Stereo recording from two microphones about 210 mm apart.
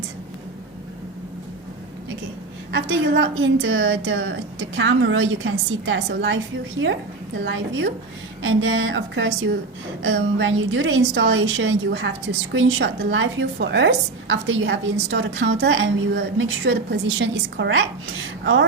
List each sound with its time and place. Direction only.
2.7 s a woman's voice: 60° right (ahead or behind)